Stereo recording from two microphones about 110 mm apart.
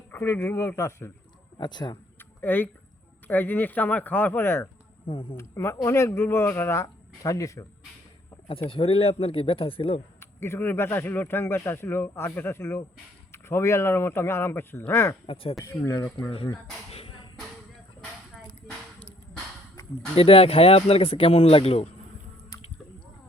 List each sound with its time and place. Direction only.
0.1 s speech: 20° left (ahead or behind)
1.5 s speech: 40° left (ahead or behind)
2.1 s a sound: 15° left (ahead or behind)
3.2 s speech: 15° left (ahead or behind)
5.0 s speech: 50° left (ahead or behind)
5.4 s speech: 25° left (ahead or behind)
8.7 s speech: 55° left (ahead or behind)
10.2 s speech: 20° left (ahead or behind)
16.9 s a sound: 60° left (ahead or behind)
20.1 s speech: 60° left (ahead or behind)